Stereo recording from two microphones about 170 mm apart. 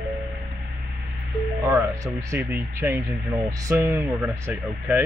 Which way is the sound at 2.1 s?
20° right (ahead or behind).